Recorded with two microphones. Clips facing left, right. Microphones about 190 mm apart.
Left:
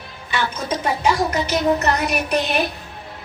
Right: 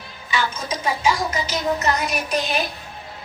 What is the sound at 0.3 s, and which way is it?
A woman's voice, 60° left (ahead or behind).